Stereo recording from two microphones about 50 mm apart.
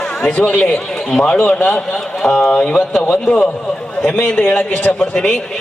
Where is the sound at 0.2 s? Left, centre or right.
Left.